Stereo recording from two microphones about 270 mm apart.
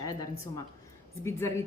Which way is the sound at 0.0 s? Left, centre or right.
Centre.